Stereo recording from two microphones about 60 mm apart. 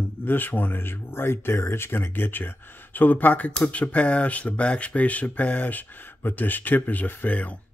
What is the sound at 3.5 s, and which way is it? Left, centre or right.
Speech, centre.